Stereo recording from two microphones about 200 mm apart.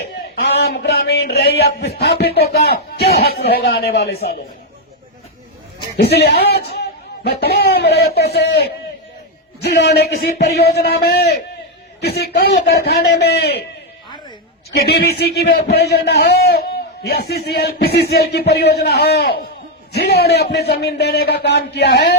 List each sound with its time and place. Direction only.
0.6 s a man's voice: 55° left (ahead or behind)
6.0 s a man's voice: 55° left (ahead or behind)
14.7 s a man's voice: 50° left (ahead or behind)